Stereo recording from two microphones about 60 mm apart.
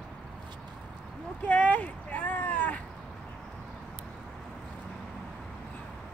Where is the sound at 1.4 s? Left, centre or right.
Left.